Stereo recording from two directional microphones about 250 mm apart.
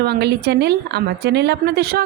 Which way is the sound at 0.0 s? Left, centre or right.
Right.